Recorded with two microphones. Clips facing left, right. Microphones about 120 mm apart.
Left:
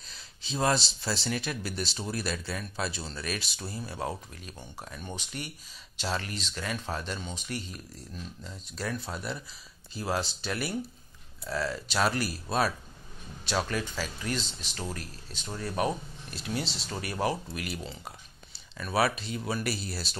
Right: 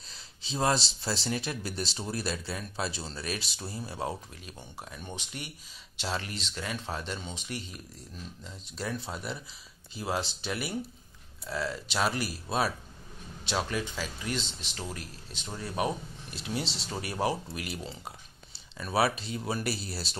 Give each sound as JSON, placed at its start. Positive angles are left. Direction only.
{"t": 0.1, "sound": "speech", "side_deg": -30}
{"t": 5.1, "sound": "speech", "side_deg": -20}